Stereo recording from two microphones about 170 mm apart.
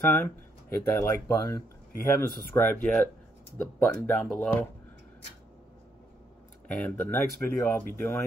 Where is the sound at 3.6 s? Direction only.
5° left (ahead or behind).